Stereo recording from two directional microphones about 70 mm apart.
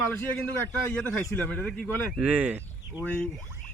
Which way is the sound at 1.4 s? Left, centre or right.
Left.